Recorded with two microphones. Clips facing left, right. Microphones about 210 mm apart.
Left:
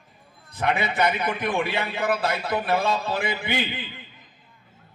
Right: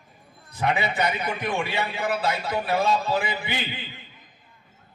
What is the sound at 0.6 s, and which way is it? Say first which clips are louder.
A man's voice: left 1 dB; 55° left (ahead or behind).